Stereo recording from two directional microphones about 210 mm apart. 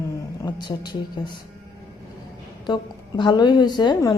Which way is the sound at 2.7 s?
20° left (ahead or behind).